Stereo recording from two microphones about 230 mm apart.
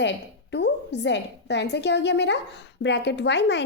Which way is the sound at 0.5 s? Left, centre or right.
Left.